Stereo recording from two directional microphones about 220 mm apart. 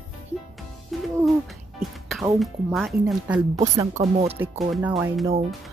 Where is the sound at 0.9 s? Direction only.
Centre (ahead or behind).